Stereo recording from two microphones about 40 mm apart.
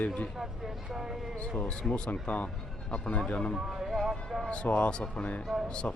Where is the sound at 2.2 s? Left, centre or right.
Left.